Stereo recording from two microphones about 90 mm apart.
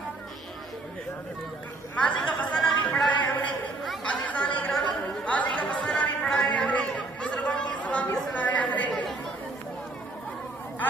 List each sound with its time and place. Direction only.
2.0 s chatter: 15° left (ahead or behind)
3.1 s a sound: 20° left (ahead or behind)
4.0 s chatter: 15° left (ahead or behind)